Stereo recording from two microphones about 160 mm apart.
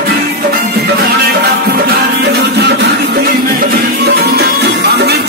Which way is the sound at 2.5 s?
90° right.